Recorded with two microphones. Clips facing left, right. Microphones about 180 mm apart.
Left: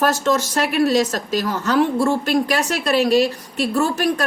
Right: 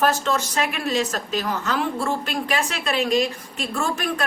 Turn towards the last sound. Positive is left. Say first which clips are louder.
# left 6 dB
turn(degrees=40)  # may be behind; listen again after turning